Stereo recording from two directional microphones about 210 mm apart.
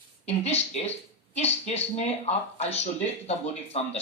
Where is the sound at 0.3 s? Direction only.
30° left (ahead or behind).